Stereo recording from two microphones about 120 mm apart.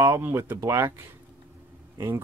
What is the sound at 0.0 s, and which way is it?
Speech, 20° right (ahead or behind).